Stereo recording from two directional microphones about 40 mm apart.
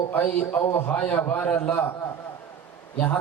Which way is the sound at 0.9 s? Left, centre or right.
Left.